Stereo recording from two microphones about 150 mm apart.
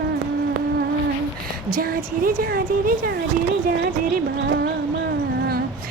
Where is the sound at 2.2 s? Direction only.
70° right (ahead or behind).